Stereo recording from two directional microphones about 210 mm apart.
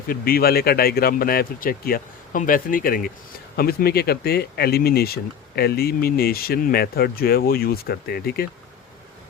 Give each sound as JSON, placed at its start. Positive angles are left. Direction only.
{"t": 0.1, "sound": "speech", "side_deg": 45}